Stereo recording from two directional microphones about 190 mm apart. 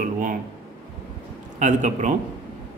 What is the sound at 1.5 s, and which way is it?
Speech, 40° right (ahead or behind).